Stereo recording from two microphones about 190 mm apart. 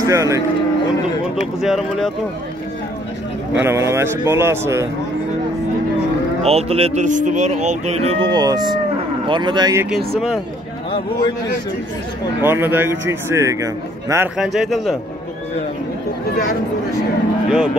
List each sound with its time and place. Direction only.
0.0 s speech: 15° right (ahead or behind)
1.3 s speech: centre (ahead or behind)
3.5 s a man's voice: 15° right (ahead or behind)
6.4 s speech: 30° right (ahead or behind)
9.8 s speech: centre (ahead or behind)
12.4 s a man's voice: 10° right (ahead or behind)
14.3 s speech: centre (ahead or behind)